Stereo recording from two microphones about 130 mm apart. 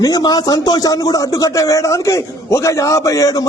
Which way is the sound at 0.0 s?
30° left (ahead or behind).